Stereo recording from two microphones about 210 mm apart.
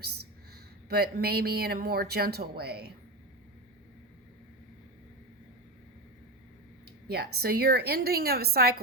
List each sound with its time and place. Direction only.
0.9 s speech: 50° right (ahead or behind)
7.3 s speech: 45° right (ahead or behind)